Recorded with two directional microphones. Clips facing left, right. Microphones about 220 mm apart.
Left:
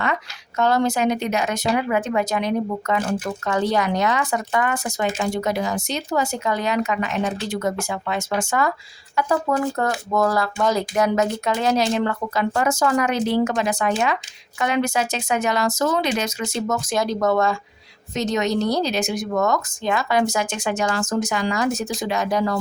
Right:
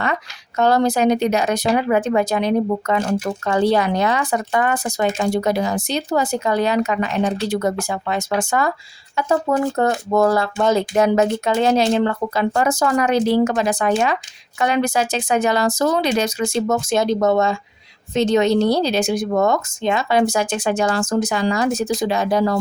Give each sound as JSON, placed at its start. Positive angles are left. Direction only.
{"t": 0.0, "sound": "speech", "side_deg": -35}
{"t": 9.1, "sound": "speech", "side_deg": -25}